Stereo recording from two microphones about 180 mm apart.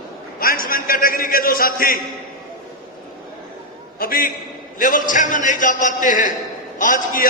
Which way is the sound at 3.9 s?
55° left (ahead or behind).